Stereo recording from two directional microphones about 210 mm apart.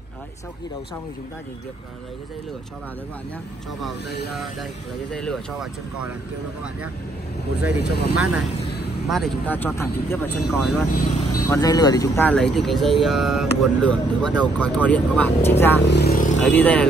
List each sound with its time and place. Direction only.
5.1 s speech: 5° left (ahead or behind)
7.8 s speech: 50° left (ahead or behind)
9.1 s speech: 5° left (ahead or behind)
11.0 s vehicle: 40° left (ahead or behind)
11.4 s speech: 15° left (ahead or behind)
15.9 s vehicle: 50° left (ahead or behind)
16.4 s speech: 5° left (ahead or behind)